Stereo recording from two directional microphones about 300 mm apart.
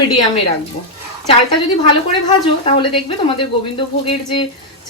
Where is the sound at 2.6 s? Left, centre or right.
Centre.